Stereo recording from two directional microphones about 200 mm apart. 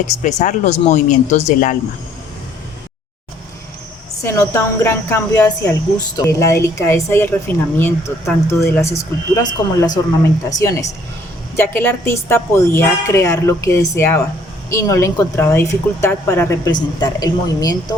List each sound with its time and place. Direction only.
0.2 s speech: 35° left (ahead or behind)
4.2 s speech: 15° left (ahead or behind)